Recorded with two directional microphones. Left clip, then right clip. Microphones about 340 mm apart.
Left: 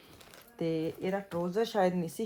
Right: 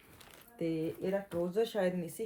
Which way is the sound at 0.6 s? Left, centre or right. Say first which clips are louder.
Left 3 dB; centre.